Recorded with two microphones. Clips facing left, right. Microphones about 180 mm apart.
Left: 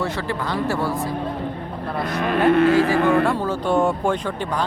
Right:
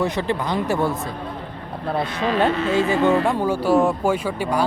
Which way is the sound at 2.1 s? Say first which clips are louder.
Left 5 dB; 55° left (ahead or behind).